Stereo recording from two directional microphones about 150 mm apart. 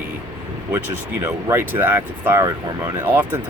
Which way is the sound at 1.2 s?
15° right (ahead or behind).